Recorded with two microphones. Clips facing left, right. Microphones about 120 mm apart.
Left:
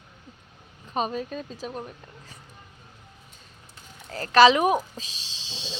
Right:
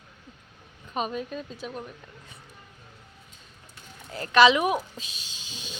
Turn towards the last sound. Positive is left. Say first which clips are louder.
# left 3 dB
turn(degrees=30)  # may be behind; listen again after turning